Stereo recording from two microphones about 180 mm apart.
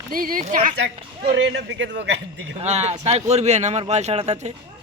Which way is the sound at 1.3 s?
85° right.